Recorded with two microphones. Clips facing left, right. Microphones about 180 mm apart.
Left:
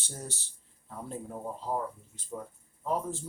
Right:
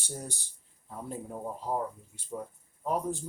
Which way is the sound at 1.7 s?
10° right (ahead or behind).